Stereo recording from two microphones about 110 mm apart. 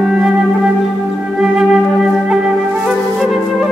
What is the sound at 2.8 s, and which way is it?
Flute, 5° right (ahead or behind).